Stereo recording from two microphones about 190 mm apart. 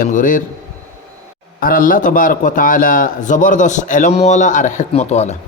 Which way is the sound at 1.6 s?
50° left (ahead or behind).